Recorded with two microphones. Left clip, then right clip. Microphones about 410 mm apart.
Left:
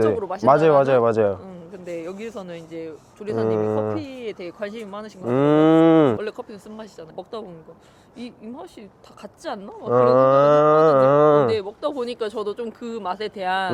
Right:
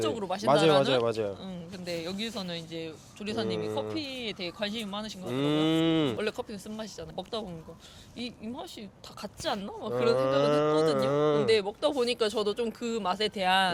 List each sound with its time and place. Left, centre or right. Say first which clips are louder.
0.2 s speech: left 6 dB; right
0.4 s speech: left 8 dB; left
1.5 s speech: left 4 dB; right
3.4 s speech: left 12 dB; left
4.1 s speech: left 4 dB; right
5.3 s speech: left 12 dB; left
6.1 s speech: left 3 dB; right
9.2 s speech: left 2 dB; right
9.9 s speech: left 11 dB; left
11.4 s speech: left 3 dB; right